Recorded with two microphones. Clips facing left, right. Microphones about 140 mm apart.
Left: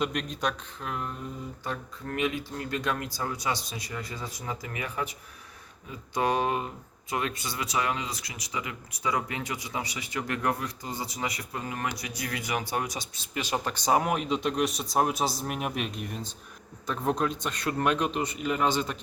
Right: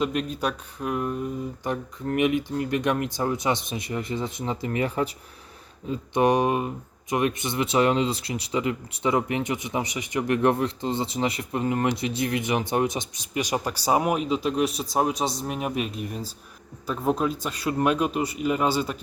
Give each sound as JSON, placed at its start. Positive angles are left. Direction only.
{"t": 0.0, "sound": "a man's voice", "side_deg": -5}
{"t": 2.1, "sound": "speech", "side_deg": -20}
{"t": 6.1, "sound": "a man's voice", "side_deg": -20}